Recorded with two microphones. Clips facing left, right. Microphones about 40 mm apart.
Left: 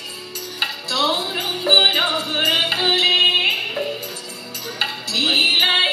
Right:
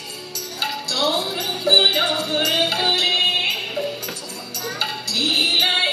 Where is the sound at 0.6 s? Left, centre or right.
Left.